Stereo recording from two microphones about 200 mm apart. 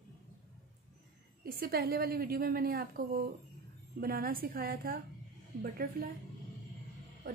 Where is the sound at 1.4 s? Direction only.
50° right (ahead or behind).